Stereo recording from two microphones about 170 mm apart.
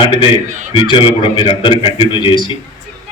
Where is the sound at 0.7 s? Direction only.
30° left (ahead or behind).